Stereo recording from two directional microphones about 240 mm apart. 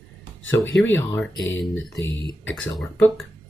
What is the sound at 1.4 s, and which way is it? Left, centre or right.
Speech, left.